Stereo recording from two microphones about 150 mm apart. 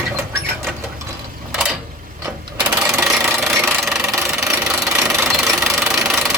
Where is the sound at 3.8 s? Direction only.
Centre (ahead or behind).